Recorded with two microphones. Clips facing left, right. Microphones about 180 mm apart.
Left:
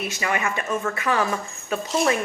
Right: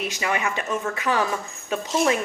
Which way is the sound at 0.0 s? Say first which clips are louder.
Even; 15° right (ahead or behind).